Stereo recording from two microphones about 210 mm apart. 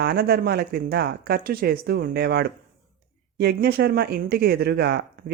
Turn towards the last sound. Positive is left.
turn(degrees=-50)  # may be behind; listen again after turning